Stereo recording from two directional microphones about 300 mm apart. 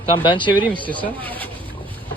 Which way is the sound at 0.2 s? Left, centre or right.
Centre.